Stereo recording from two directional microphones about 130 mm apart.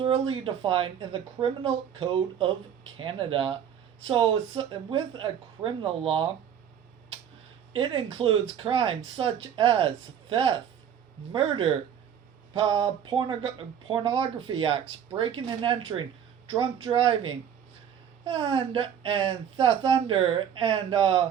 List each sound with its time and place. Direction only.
0.0 s speech: 45° right (ahead or behind)
7.7 s speech: 45° right (ahead or behind)